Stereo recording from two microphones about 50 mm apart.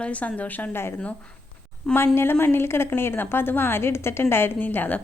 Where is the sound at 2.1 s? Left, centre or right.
Left.